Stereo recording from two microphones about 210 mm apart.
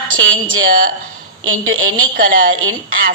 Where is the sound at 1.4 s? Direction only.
75° right (ahead or behind).